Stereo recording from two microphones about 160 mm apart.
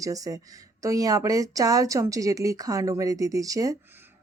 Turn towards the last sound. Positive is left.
turn(degrees=-20)  # may be behind; listen again after turning